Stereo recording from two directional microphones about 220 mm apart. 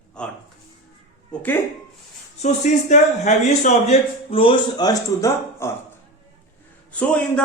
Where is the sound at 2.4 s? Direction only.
30° left (ahead or behind); by 5.7 s 15° left (ahead or behind).